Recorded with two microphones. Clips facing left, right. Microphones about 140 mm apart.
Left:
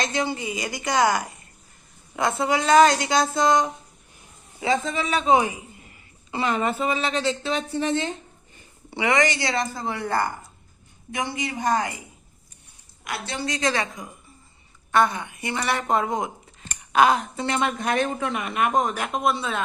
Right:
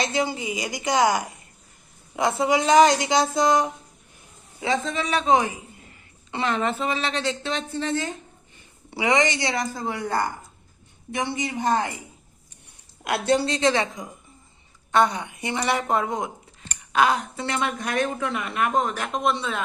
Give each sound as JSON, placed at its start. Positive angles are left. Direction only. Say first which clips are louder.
{"t": 0.0, "sound": "a woman's voice", "louder": "right 1 dB", "side_deg": -10}
{"t": 4.6, "sound": "a woman's voice", "louder": "left 1 dB", "side_deg": 0}
{"t": 7.7, "sound": "speech", "louder": "left 2 dB", "side_deg": 15}
{"t": 9.0, "sound": "a woman's voice", "louder": "even", "side_deg": -15}
{"t": 11.4, "sound": "a woman's voice", "louder": "even", "side_deg": -25}
{"t": 13.1, "sound": "a woman's voice", "louder": "right 8 dB", "side_deg": -60}
{"t": 13.4, "sound": "a woman's voice", "louder": "right 3 dB", "side_deg": -25}
{"t": 15.8, "sound": "a woman's voice", "louder": "left 1 dB", "side_deg": 0}
{"t": 16.6, "sound": "cutlery", "louder": "left 2 dB", "side_deg": 45}
{"t": 17.3, "sound": "speech", "louder": "left 2 dB", "side_deg": 25}